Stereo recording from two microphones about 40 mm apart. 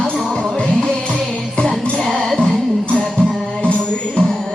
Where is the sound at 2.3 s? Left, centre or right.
Centre.